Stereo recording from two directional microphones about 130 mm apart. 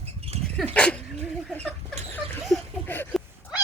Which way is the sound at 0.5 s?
5° left (ahead or behind).